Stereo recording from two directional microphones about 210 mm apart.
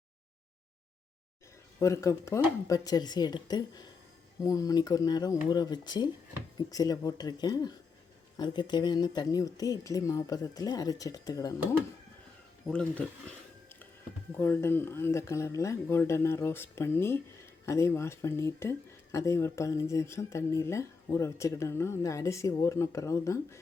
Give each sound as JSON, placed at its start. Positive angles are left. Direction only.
{"t": 1.8, "sound": "speech", "side_deg": 15}
{"t": 12.6, "sound": "speech", "side_deg": 5}
{"t": 14.3, "sound": "speech", "side_deg": 10}